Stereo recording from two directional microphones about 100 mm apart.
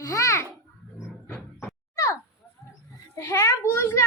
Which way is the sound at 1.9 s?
30° left (ahead or behind).